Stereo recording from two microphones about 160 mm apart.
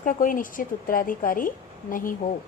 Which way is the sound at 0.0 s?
55° left (ahead or behind).